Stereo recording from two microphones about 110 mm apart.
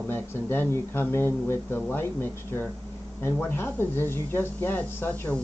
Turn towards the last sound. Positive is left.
turn(degrees=15)  # may be behind; listen again after turning